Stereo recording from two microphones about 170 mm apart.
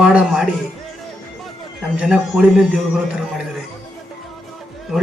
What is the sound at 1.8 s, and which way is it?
Speech, 5° right (ahead or behind).